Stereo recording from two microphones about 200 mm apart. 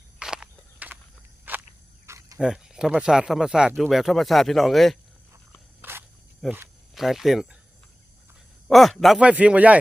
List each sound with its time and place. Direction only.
0.2 s walk: 5° right (ahead or behind)
1.5 s a sound: 10° right (ahead or behind)
2.0 s cricket: 15° right (ahead or behind)
2.4 s speech: 5° right (ahead or behind)
5.8 s snake: 10° right (ahead or behind)
6.5 s speech: 5° right (ahead or behind)
8.6 s speech: centre (ahead or behind)